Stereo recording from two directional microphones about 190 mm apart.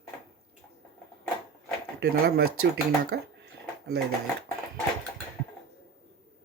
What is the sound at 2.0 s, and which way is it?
Speech, 55° right (ahead or behind).